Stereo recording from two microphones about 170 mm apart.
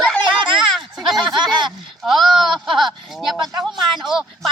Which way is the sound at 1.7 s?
Centre (ahead or behind).